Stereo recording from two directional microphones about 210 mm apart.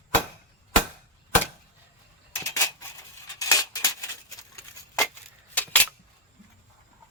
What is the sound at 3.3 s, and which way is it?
Scissors, 15° left (ahead or behind).